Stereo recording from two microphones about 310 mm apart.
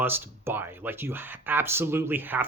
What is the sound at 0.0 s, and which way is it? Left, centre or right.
Speech, centre.